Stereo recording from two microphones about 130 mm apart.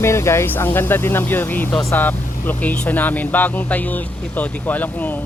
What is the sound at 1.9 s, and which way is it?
Vehicle, 15° left (ahead or behind).